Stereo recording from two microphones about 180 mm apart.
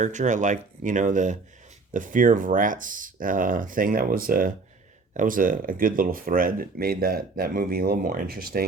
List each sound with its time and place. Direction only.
0.0 s speech: 40° right (ahead or behind)